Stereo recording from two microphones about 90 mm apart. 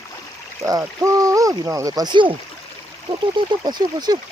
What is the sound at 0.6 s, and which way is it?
Speech, 35° right (ahead or behind).